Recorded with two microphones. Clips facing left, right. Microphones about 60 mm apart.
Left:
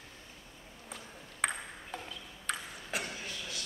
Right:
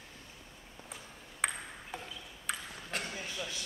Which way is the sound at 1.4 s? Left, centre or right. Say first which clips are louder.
Left 1 dB; centre.